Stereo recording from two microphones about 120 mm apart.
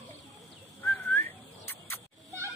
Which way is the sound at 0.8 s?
15° left (ahead or behind).